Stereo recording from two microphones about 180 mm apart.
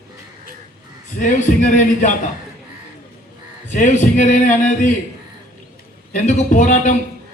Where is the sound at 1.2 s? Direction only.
45° left (ahead or behind).